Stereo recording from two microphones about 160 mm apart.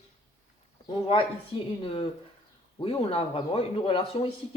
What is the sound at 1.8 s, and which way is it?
Speech, 35° left (ahead or behind).